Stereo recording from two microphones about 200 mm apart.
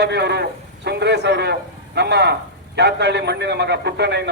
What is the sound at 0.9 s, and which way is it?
A man's voice, 55° right (ahead or behind).